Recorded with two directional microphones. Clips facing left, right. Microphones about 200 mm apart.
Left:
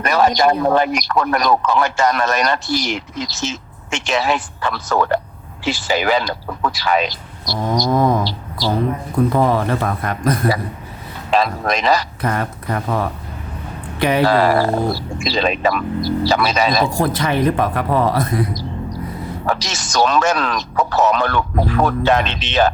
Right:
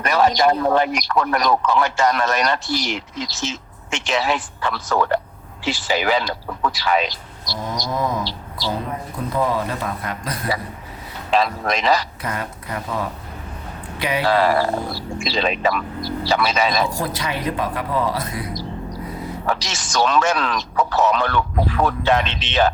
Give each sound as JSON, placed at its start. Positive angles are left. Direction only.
{"t": 0.0, "sound": "a man's voice", "side_deg": 45}
{"t": 8.2, "sound": "a sound", "side_deg": 40}
{"t": 9.3, "sound": "a man's voice", "side_deg": 60}
{"t": 16.9, "sound": "speech", "side_deg": 55}
{"t": 19.5, "sound": "a man's voice", "side_deg": 40}